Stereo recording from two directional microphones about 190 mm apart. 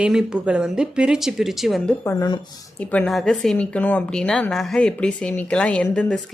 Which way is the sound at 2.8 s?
5° left (ahead or behind).